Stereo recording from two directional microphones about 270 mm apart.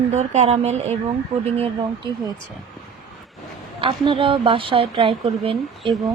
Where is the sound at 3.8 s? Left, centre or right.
Centre.